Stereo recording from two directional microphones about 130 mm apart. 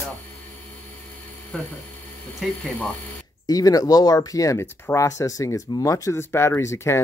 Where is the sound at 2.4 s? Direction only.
5° left (ahead or behind).